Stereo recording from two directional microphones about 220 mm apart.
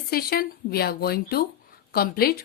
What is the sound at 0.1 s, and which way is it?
Speech, 45° left (ahead or behind).